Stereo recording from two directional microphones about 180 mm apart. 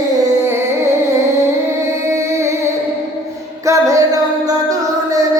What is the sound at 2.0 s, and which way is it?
Music, 15° right (ahead or behind).